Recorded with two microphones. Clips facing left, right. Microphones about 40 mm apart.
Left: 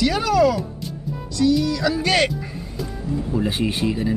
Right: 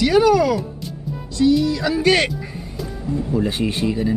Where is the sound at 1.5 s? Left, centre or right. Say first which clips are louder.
Right 2 dB; right.